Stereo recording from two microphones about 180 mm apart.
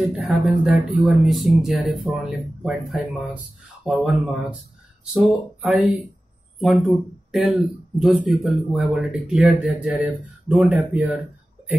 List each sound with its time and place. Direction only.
0.0 s speech: centre (ahead or behind)
7.3 s speech: centre (ahead or behind)